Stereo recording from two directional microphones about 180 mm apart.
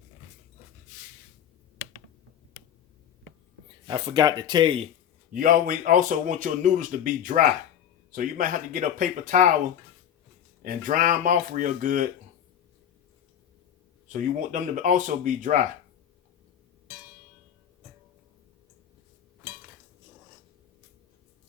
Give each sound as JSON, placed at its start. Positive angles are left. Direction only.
{"t": 3.8, "sound": "speech", "side_deg": -25}
{"t": 5.3, "sound": "speech", "side_deg": -50}
{"t": 10.6, "sound": "speech", "side_deg": -50}
{"t": 14.1, "sound": "speech", "side_deg": -45}